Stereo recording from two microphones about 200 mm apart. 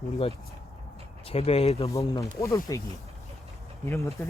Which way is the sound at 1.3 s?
30° left (ahead or behind).